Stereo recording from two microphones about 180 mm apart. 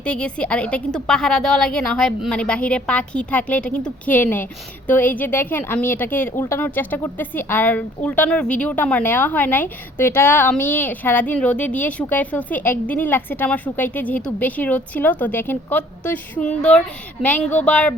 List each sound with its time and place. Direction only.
0.0 s speech: 5° left (ahead or behind)